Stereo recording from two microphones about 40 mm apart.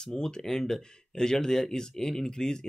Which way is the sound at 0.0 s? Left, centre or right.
Centre.